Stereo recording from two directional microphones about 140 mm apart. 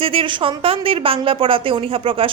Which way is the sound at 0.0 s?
40° right (ahead or behind).